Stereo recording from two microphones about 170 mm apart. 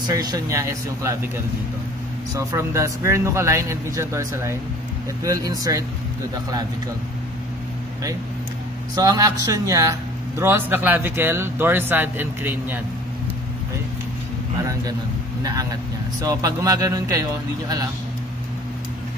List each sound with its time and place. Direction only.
0.0 s speech: 25° right (ahead or behind)
2.3 s speech: 20° right (ahead or behind)
8.9 s speech: 20° right (ahead or behind)
14.6 s speech: 20° right (ahead or behind)
16.2 s speech: 20° right (ahead or behind)